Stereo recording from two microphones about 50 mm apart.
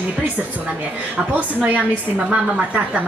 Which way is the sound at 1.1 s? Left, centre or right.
Right.